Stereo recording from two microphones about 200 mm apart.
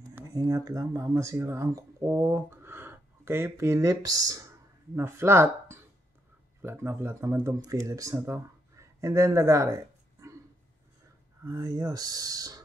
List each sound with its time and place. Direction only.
0.1 s speech: 15° right (ahead or behind)
11.4 s speech: 20° right (ahead or behind)